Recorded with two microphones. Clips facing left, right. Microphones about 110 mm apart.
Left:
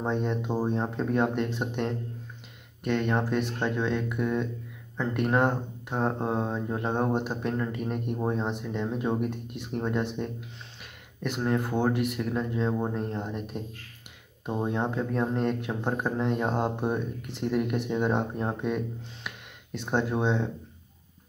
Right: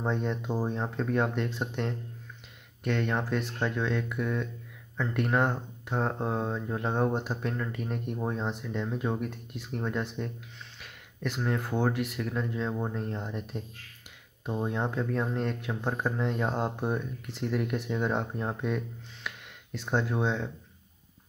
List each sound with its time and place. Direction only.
0.0 s speech: 15° left (ahead or behind)
11.4 s speech: 15° left (ahead or behind)